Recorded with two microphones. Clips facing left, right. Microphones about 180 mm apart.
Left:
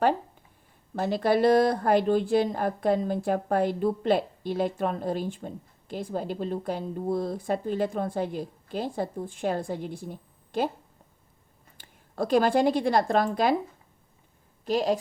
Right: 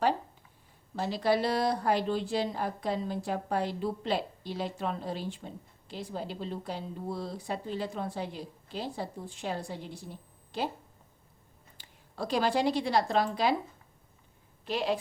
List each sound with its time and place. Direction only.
0.9 s a woman's voice: 50° left (ahead or behind)
11.8 s speech: 50° left (ahead or behind)
14.6 s a woman's voice: 40° left (ahead or behind)